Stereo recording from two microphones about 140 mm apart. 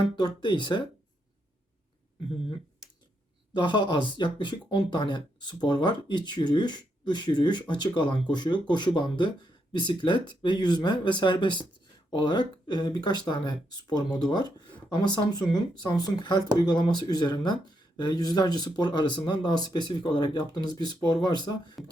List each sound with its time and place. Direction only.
0.2 s speech: 35° left (ahead or behind)
3.5 s speech: 35° left (ahead or behind)